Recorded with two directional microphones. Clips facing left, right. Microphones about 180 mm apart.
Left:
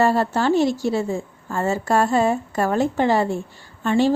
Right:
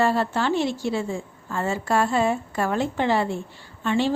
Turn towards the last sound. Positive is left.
turn(degrees=45)  # may be behind; listen again after turning